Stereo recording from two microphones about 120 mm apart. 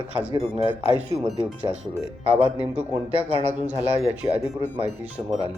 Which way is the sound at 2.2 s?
50° right (ahead or behind).